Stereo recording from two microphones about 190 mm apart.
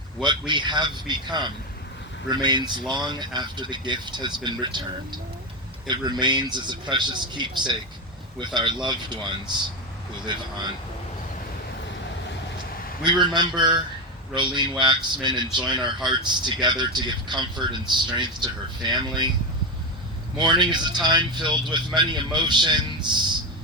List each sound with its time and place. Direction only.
0.2 s speech: 25° right (ahead or behind)
13.1 s speech: 25° right (ahead or behind)
15.4 s speech: centre (ahead or behind)
16.0 s speech: 25° right (ahead or behind)
20.4 s speech: 25° right (ahead or behind)